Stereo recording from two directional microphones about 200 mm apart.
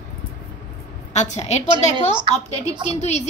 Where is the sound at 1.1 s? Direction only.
35° left (ahead or behind).